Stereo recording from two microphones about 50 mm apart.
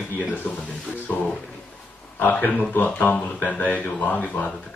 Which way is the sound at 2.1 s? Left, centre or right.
Left.